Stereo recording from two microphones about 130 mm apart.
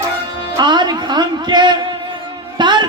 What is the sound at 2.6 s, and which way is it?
Music, 35° right (ahead or behind).